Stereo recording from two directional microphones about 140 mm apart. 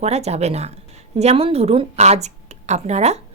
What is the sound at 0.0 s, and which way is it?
Speech, 50° right (ahead or behind).